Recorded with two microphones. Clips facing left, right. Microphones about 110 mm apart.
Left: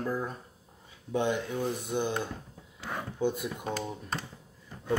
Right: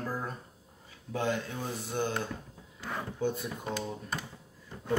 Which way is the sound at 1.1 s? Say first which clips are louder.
Left 3 dB; 20° left (ahead or behind).